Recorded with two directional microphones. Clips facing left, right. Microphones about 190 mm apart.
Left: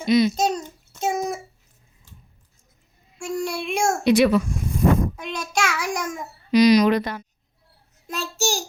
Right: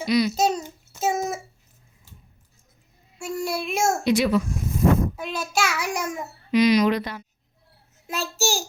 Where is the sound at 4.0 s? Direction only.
65° left (ahead or behind).